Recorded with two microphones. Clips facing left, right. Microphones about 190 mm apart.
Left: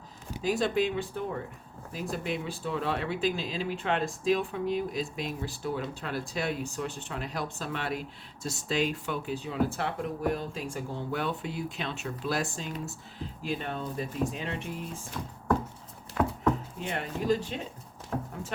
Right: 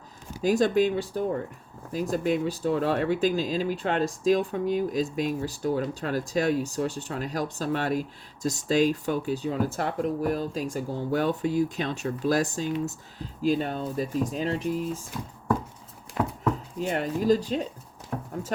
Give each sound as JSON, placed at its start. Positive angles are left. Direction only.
{"t": 0.4, "sound": "speech", "side_deg": -45}
{"t": 16.2, "sound": "dog", "side_deg": -20}
{"t": 16.8, "sound": "speech", "side_deg": -40}